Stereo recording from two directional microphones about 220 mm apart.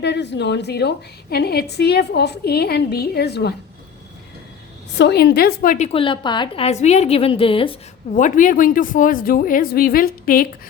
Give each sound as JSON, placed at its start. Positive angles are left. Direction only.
{"t": 0.0, "sound": "a woman's voice", "side_deg": 50}
{"t": 4.9, "sound": "a woman's voice", "side_deg": 50}